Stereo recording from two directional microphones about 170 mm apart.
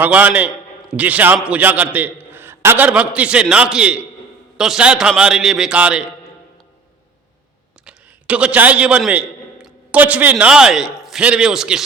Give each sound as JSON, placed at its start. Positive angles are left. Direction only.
{"t": 0.0, "sound": "a man's voice", "side_deg": -10}
{"t": 7.9, "sound": "a man's voice", "side_deg": -5}